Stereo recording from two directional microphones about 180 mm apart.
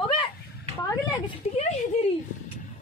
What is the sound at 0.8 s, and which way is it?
Speech, 25° left (ahead or behind).